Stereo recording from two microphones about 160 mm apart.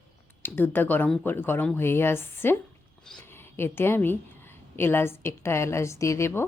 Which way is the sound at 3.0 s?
5° left (ahead or behind).